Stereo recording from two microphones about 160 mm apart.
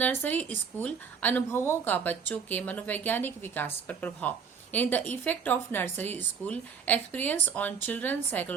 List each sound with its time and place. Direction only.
0.0 s a woman's voice: 10° left (ahead or behind)